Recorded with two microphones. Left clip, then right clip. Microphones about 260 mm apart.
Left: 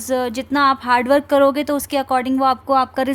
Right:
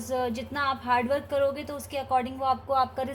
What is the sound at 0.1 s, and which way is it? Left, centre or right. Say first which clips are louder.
A woman's voice: left 10 dB; left.